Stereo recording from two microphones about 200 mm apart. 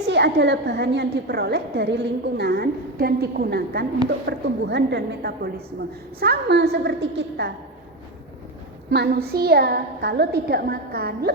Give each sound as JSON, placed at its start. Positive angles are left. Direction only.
{"t": 0.1, "sound": "a woman's voice", "side_deg": -60}
{"t": 8.9, "sound": "a woman's voice", "side_deg": -55}